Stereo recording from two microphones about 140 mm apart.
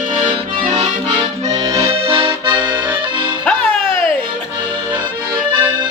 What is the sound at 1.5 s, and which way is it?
Accordion, 25° right (ahead or behind).